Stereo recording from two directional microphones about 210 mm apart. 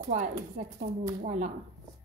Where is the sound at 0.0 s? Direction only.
35° right (ahead or behind).